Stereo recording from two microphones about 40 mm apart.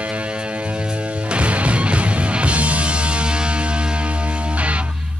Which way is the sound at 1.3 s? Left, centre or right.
Right.